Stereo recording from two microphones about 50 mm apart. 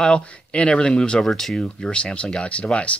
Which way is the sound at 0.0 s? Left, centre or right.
Left.